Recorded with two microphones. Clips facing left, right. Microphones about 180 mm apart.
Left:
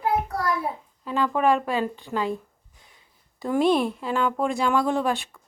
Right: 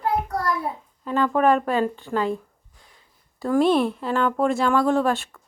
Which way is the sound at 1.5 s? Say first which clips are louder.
Right 3 dB; 45° right (ahead or behind).